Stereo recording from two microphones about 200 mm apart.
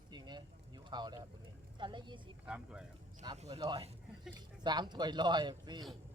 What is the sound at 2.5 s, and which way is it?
Speech, 5° right (ahead or behind).